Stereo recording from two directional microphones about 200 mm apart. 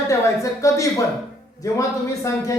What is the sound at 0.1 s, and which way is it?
A man's voice, 15° left (ahead or behind).